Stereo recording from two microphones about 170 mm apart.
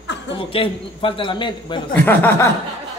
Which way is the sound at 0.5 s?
30° left (ahead or behind).